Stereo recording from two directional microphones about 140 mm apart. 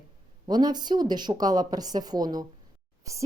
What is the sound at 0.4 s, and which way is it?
Speech, 30° right (ahead or behind).